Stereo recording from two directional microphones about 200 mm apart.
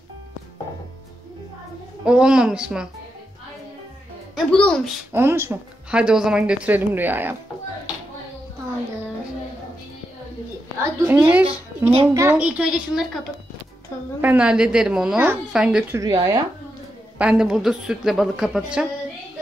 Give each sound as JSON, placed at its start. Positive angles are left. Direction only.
{"t": 2.0, "sound": "a woman's voice", "side_deg": -5}
{"t": 4.4, "sound": "a woman's voice", "side_deg": 5}
{"t": 5.1, "sound": "speech", "side_deg": -10}
{"t": 10.8, "sound": "speech", "side_deg": -10}
{"t": 14.2, "sound": "a woman's voice", "side_deg": -5}
{"t": 16.0, "sound": "speech", "side_deg": -20}
{"t": 17.2, "sound": "a woman's voice", "side_deg": -5}